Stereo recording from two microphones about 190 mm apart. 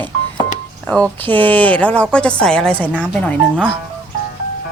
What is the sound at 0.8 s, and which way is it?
A woman's voice, 5° left (ahead or behind).